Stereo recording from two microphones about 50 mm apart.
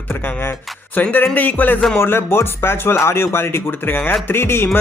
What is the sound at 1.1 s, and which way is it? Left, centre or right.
Speech, left.